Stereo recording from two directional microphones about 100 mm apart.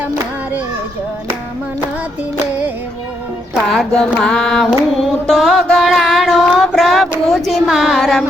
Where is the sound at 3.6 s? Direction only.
5° left (ahead or behind).